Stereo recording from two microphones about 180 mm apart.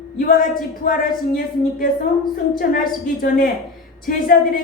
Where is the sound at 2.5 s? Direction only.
55° left (ahead or behind).